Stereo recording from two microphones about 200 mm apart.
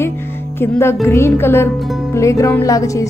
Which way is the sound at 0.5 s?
10° left (ahead or behind).